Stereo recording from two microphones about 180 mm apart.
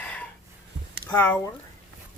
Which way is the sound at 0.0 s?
10° left (ahead or behind).